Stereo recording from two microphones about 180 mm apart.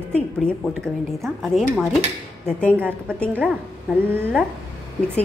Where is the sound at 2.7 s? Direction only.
10° right (ahead or behind).